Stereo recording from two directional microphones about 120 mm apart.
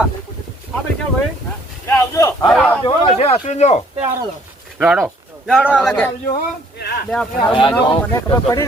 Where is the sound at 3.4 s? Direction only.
70° left (ahead or behind).